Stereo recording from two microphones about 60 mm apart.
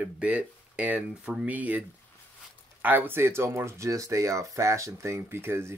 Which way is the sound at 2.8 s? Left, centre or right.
Right.